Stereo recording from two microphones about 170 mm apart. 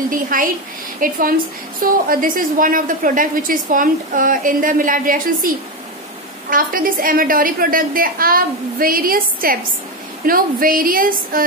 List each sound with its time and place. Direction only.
0.1 s a woman's voice: 55° right (ahead or behind)
6.5 s a woman's voice: 55° right (ahead or behind)